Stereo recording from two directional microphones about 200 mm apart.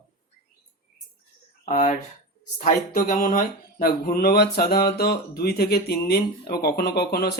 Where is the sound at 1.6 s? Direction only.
35° left (ahead or behind).